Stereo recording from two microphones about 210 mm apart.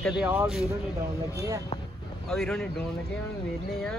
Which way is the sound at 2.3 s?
5° left (ahead or behind).